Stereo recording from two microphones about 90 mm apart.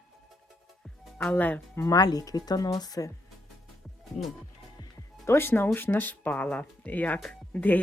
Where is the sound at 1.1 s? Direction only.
20° left (ahead or behind).